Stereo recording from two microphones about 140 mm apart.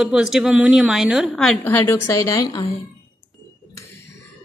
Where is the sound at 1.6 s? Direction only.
15° left (ahead or behind).